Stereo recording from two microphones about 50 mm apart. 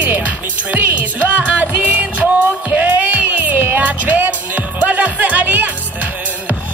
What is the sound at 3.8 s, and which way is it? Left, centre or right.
Music, right.